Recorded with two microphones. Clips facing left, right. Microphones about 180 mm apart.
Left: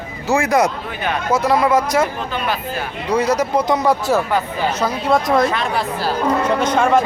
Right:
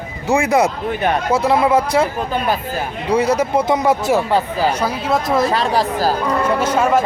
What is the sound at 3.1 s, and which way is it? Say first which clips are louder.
Speech: right 1 dB; 30° right (ahead or behind).